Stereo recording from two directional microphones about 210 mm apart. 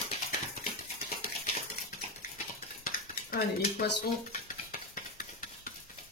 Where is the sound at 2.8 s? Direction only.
45° left (ahead or behind).